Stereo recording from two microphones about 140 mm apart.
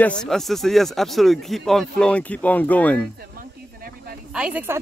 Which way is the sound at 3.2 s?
90° right.